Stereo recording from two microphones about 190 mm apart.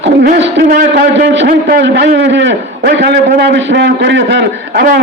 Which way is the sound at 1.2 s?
70° right (ahead or behind).